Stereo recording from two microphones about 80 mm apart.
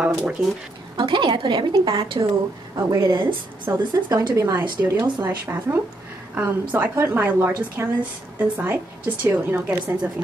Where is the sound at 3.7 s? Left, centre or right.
Right.